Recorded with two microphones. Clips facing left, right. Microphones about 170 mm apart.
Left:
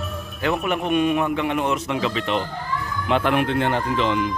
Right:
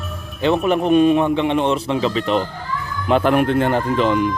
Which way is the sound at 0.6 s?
35° right (ahead or behind).